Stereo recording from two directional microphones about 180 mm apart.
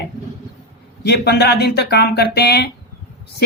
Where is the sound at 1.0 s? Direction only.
65° left (ahead or behind).